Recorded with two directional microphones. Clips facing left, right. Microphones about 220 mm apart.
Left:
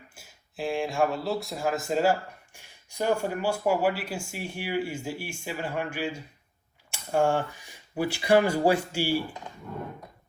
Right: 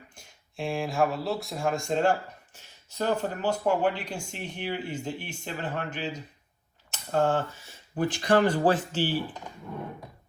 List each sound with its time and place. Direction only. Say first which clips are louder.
0.1 s speech: even; 5° left (ahead or behind)